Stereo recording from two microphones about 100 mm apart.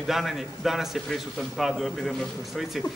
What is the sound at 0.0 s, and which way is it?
A man's voice, centre (ahead or behind).